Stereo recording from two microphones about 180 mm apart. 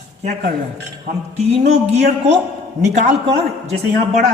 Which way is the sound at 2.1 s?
40° right (ahead or behind).